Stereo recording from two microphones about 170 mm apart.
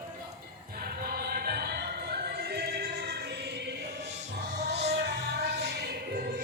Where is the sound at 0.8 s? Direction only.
65° right (ahead or behind); by 3.7 s 80° right.